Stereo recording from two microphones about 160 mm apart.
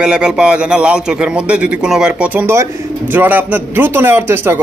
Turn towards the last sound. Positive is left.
turn(degrees=-15)  # may be behind; listen again after turning